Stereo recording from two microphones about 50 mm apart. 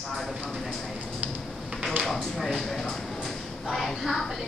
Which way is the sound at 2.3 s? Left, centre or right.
Centre.